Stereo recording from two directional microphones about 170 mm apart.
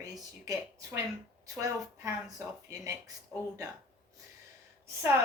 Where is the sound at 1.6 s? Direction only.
20° right (ahead or behind).